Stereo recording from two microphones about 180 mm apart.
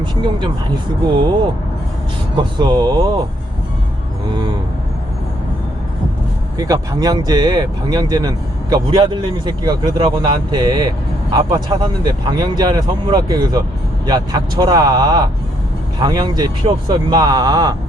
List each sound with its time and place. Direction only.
0.0 s speech: 25° right (ahead or behind)
6.6 s speech: 20° right (ahead or behind)